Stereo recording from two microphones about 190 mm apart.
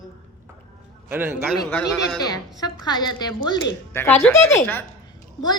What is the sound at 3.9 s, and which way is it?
Speech, 10° left (ahead or behind).